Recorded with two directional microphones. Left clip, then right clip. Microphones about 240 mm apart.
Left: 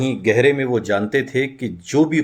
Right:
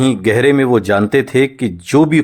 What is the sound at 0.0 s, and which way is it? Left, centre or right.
Speech, right.